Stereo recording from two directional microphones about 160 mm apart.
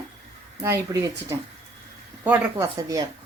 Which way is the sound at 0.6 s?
20° right (ahead or behind).